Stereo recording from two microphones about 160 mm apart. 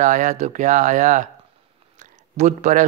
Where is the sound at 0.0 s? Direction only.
55° right (ahead or behind).